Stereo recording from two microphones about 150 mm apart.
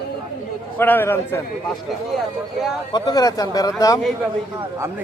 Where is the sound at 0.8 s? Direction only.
15° left (ahead or behind).